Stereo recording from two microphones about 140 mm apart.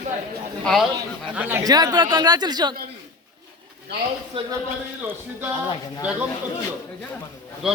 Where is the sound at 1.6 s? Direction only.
30° right (ahead or behind).